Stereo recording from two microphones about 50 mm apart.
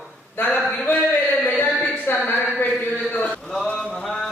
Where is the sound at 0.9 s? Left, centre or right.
Left.